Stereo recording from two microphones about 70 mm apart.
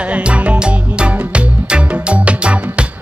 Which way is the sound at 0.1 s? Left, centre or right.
Centre.